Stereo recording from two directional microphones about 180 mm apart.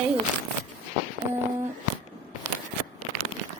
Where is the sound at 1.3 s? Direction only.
10° right (ahead or behind).